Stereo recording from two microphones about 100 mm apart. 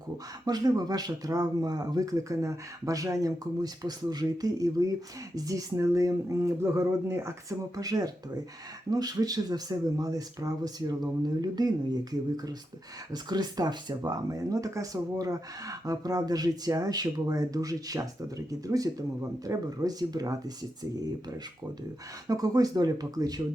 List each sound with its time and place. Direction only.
0.4 s speech: 40° right (ahead or behind)
7.8 s speech: 40° right (ahead or behind)
13.2 s speech: 45° right (ahead or behind)
22.3 s speech: 40° right (ahead or behind)